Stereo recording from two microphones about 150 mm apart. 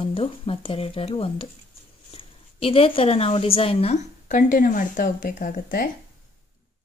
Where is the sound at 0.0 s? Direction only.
35° left (ahead or behind).